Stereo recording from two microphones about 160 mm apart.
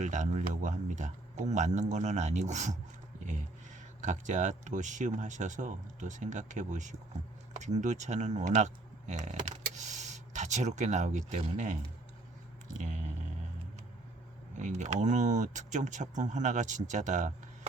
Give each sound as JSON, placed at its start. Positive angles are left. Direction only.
{"t": 0.0, "sound": "speech", "side_deg": -50}
{"t": 4.0, "sound": "speech", "side_deg": -50}
{"t": 12.6, "sound": "a sound", "side_deg": -50}
{"t": 14.5, "sound": "speech", "side_deg": -50}